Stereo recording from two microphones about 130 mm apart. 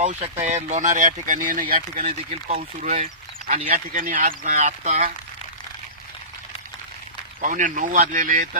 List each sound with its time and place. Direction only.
0.0 s speech: 65° right (ahead or behind); by 2.1 s 90° right
2.8 s speech: 65° right (ahead or behind)
7.4 s speech: 80° right